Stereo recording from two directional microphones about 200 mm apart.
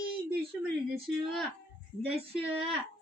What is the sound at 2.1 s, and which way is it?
Speech, 30° right (ahead or behind).